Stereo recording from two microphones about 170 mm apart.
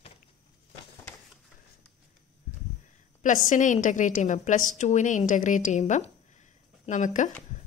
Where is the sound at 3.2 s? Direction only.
50° left (ahead or behind).